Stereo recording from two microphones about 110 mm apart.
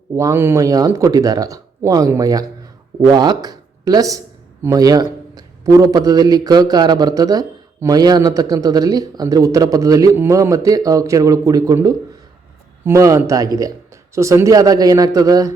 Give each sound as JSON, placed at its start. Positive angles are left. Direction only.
{"t": 0.2, "sound": "a man's voice", "side_deg": -25}